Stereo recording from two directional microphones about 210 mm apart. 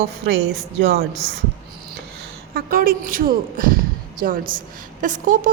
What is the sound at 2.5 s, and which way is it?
A woman's voice, 45° right (ahead or behind).